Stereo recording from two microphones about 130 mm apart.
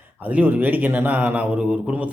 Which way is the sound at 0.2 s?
10° right (ahead or behind).